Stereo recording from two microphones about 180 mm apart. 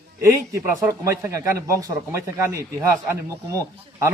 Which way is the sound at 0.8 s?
15° right (ahead or behind).